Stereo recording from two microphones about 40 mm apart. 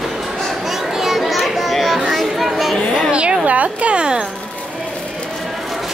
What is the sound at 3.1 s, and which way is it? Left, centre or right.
Speech, right.